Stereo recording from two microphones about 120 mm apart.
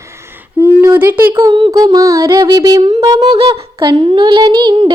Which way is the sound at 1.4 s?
45° right (ahead or behind).